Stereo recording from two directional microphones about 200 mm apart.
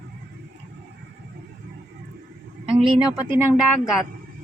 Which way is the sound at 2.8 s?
Centre (ahead or behind).